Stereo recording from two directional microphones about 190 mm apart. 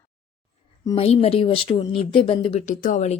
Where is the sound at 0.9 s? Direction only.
30° left (ahead or behind).